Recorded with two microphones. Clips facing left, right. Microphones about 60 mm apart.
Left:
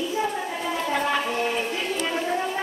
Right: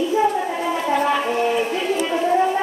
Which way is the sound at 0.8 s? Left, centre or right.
Centre.